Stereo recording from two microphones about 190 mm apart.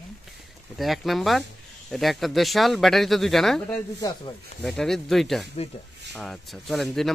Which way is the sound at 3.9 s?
20° left (ahead or behind).